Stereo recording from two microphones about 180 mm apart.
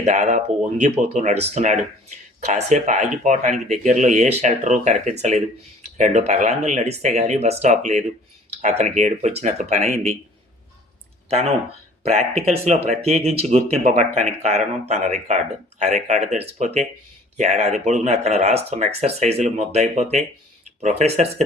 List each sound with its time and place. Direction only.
0.0 s speech: 40° right (ahead or behind)
11.3 s speech: 35° right (ahead or behind)